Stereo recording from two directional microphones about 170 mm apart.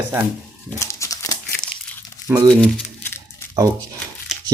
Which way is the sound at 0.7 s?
15° left (ahead or behind).